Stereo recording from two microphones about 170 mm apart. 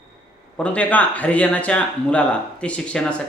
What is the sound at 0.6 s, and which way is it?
Speech, 10° left (ahead or behind).